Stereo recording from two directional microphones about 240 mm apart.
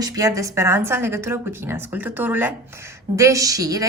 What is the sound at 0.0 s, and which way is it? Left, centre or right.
A woman's voice, centre.